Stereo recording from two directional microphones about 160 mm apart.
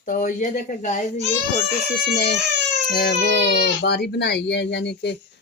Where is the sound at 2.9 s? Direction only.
75° left (ahead or behind).